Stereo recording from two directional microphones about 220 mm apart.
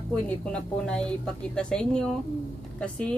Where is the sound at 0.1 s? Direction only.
5° left (ahead or behind).